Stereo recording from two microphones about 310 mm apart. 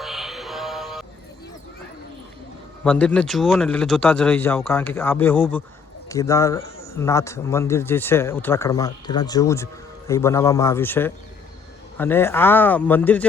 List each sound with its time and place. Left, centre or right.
0.0 s music: centre
2.8 s speech: centre